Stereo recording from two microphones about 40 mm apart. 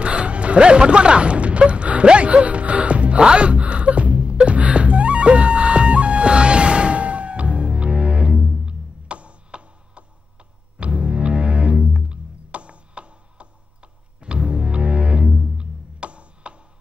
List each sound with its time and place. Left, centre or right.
0.0 s music: right